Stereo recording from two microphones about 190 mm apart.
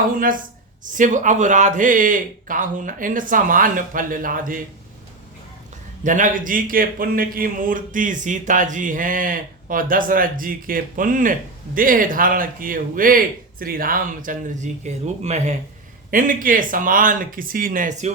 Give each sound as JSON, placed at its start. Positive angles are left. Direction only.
{"t": 0.9, "sound": "a man's voice", "side_deg": -40}
{"t": 6.0, "sound": "a man's voice", "side_deg": -40}